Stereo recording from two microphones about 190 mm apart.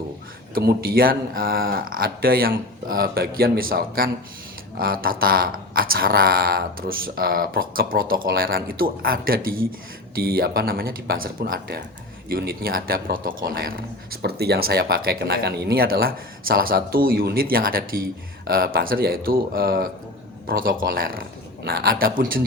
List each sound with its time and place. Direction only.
0.5 s speech: 50° right (ahead or behind)